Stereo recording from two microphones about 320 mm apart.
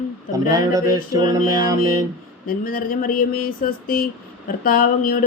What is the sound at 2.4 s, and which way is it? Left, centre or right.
Speech, left.